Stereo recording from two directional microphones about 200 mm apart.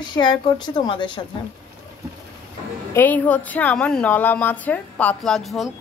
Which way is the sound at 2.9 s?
10° left (ahead or behind).